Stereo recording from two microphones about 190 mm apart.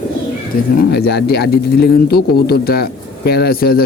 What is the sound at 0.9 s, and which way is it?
A man's voice, 60° left (ahead or behind).